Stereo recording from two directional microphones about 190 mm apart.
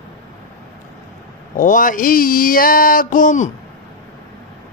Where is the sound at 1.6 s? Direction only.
45° left (ahead or behind).